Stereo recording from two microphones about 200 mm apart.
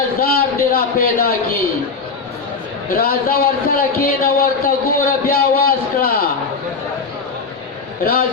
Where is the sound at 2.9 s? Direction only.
50° left (ahead or behind).